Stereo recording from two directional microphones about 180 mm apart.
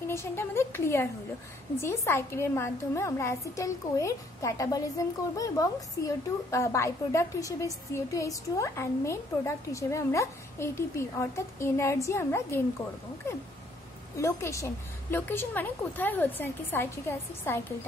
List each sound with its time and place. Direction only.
0.1 s a woman's voice: 15° left (ahead or behind)
14.1 s a woman's voice: 15° left (ahead or behind)